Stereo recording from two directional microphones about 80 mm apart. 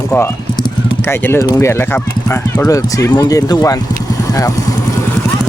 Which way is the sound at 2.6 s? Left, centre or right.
Left.